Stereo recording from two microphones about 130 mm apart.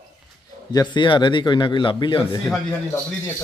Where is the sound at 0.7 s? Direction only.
35° left (ahead or behind).